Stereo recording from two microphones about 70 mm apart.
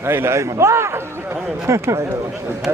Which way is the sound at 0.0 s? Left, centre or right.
Right.